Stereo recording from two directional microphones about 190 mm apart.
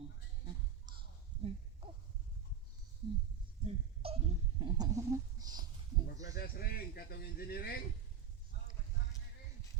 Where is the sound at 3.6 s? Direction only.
30° right (ahead or behind).